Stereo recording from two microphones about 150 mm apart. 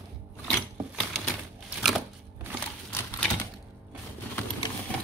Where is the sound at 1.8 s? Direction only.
Centre (ahead or behind).